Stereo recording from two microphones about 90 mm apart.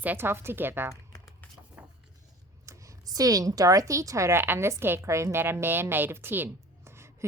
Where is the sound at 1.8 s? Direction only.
10° right (ahead or behind).